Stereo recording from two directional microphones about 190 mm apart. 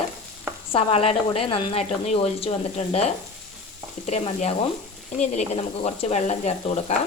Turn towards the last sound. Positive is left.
turn(degrees=35)  # may be behind; listen again after turning